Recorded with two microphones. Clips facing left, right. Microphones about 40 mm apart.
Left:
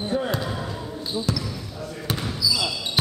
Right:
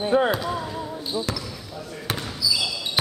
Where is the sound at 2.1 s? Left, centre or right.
Centre.